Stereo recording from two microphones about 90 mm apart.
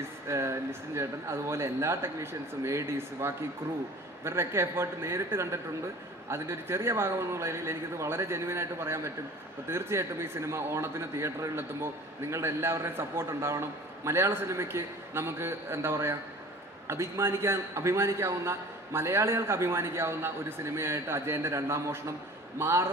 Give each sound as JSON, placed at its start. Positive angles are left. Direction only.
{"t": 0.0, "sound": "a man's voice", "side_deg": -30}